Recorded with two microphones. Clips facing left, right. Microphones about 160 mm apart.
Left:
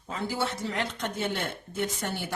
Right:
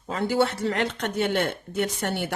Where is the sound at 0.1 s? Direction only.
70° right (ahead or behind).